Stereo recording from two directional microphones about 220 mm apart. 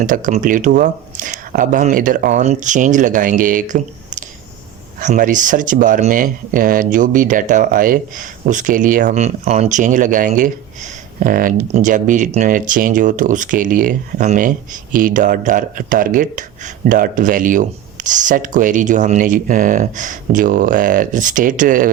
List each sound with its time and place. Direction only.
0.0 s speech: 35° right (ahead or behind)